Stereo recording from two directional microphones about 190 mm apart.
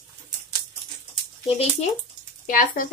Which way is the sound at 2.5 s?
45° left (ahead or behind).